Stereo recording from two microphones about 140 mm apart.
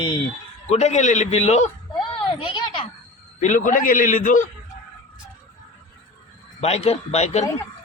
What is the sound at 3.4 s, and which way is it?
A man's voice, 65° left (ahead or behind).